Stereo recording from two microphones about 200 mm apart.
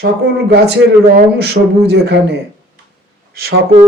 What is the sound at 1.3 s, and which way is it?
Speech, 55° right (ahead or behind).